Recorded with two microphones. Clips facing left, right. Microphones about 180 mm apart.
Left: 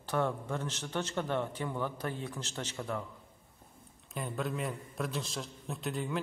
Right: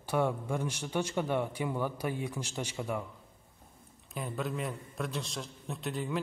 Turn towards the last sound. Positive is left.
turn(degrees=0)  # may be behind; listen again after turning